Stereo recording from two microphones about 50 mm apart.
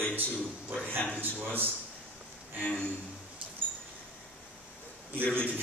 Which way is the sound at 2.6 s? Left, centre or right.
Left.